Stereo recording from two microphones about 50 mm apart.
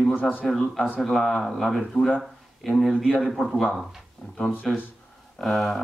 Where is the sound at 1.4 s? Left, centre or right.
Centre.